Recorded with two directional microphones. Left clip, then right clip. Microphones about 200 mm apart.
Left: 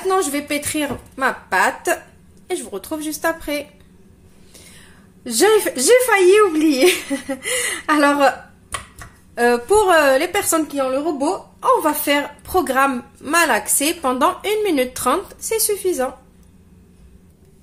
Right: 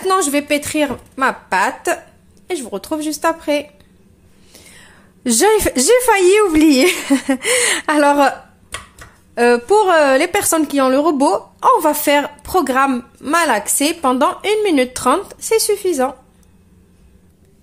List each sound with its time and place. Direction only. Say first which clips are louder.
0.0 s a woman's voice: right 3 dB; 40° right (ahead or behind)
4.6 s a sound: right 3 dB; 25° right (ahead or behind)
5.2 s speech: right 2 dB; 40° right (ahead or behind)
9.3 s a woman's voice: right 3 dB; 25° right (ahead or behind)
10.7 s speech: right 6 dB; 50° right (ahead or behind)
11.6 s a woman's voice: right 3 dB; 30° right (ahead or behind)